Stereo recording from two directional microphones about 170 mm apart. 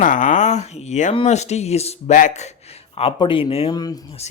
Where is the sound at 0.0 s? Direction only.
50° left (ahead or behind).